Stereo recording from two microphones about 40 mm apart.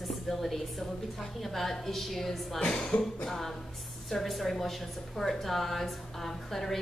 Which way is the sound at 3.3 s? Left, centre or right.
Centre.